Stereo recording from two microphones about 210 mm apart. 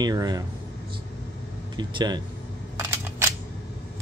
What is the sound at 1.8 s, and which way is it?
Speech, 20° right (ahead or behind).